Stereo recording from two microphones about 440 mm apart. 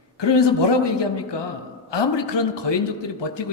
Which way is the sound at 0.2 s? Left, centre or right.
Left.